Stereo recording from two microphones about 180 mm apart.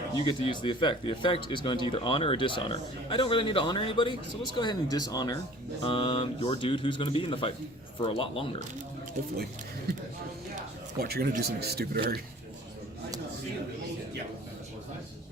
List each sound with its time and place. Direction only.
0.3 s speech: 25° left (ahead or behind)
11.0 s speech: 60° right (ahead or behind)